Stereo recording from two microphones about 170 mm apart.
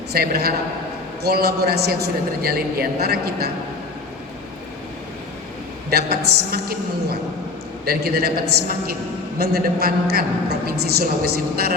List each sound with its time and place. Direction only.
0.1 s a woman's voice: 65° right (ahead or behind)
5.9 s a woman's voice: 65° right (ahead or behind)
9.4 s a woman's voice: 70° right (ahead or behind)